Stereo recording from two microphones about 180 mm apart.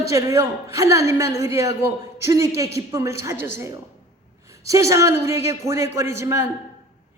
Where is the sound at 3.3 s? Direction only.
85° left.